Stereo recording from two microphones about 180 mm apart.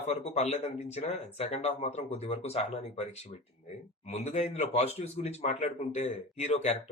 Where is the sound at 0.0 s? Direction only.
40° left (ahead or behind).